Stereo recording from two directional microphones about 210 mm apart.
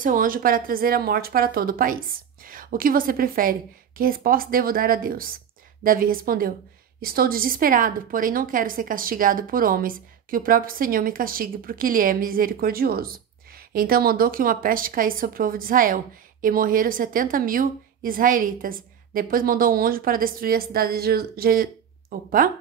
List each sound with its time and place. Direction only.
0.0 s a woman's voice: 40° right (ahead or behind)